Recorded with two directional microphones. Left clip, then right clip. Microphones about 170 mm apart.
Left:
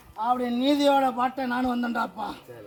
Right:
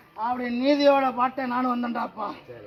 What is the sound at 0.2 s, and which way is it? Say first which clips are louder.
Speech: left 2 dB; 30° left (ahead or behind).